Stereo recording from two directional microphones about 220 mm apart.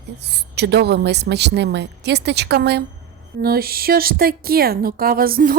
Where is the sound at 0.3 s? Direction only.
50° right (ahead or behind).